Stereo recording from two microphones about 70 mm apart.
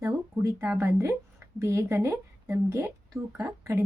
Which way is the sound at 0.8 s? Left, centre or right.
Right.